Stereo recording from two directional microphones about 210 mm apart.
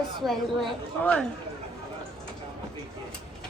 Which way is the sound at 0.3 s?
5° left (ahead or behind).